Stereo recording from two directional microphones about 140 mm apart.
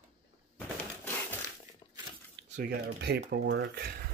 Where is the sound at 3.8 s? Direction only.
90° right.